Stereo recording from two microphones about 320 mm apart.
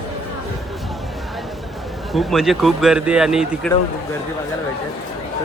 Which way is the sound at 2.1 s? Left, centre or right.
Centre.